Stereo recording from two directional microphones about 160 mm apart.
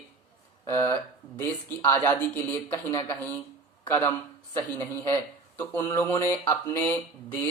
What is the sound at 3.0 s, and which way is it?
Speech, 15° left (ahead or behind).